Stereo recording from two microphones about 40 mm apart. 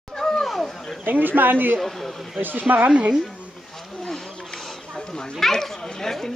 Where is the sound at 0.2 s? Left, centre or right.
Centre.